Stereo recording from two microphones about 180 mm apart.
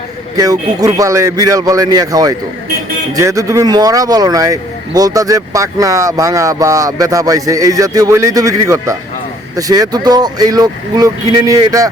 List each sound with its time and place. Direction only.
0.3 s speech: 20° right (ahead or behind)